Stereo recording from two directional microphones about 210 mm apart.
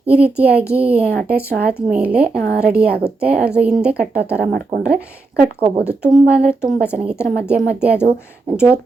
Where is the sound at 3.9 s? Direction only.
50° right (ahead or behind).